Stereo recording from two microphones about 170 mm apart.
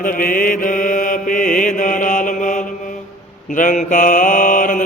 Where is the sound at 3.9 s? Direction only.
50° left (ahead or behind).